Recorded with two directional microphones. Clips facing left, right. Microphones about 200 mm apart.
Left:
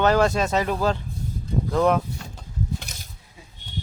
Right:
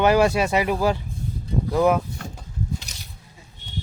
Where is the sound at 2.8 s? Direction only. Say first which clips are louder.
Left 1 dB; 50° left (ahead or behind).